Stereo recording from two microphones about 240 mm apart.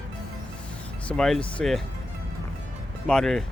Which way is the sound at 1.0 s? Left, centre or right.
Centre.